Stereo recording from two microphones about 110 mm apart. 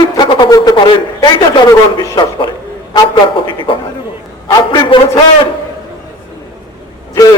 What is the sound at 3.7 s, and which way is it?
A man's voice, 55° left (ahead or behind).